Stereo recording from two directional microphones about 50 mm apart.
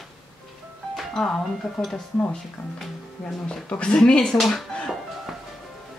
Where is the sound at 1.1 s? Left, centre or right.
Centre.